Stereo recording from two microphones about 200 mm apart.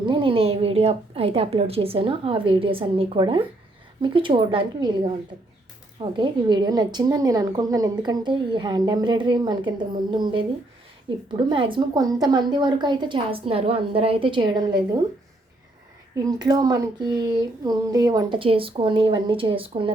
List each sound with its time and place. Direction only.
0.0 s a woman's voice: 25° right (ahead or behind)
16.2 s a woman's voice: 20° right (ahead or behind)